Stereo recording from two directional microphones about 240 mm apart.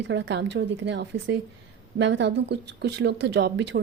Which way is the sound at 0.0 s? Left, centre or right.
Right.